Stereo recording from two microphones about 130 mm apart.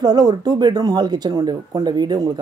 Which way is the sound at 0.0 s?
30° right (ahead or behind).